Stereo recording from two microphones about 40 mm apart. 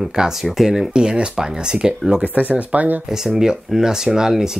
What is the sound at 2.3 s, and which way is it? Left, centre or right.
Speech, right.